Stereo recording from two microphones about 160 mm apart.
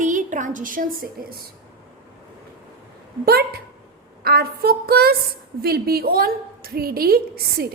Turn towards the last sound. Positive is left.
turn(degrees=-70)  # may be behind; listen again after turning